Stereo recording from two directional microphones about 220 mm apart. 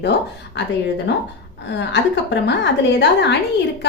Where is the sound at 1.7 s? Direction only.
50° left (ahead or behind).